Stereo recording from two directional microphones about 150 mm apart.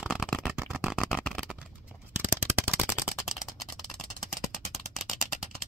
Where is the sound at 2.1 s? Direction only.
15° right (ahead or behind).